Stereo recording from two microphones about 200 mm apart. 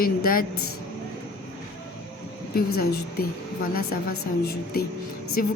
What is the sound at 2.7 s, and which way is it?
A woman's voice, 50° left (ahead or behind).